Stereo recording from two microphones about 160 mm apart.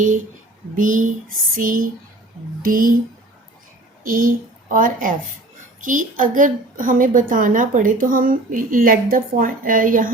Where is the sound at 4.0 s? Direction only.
60° right (ahead or behind).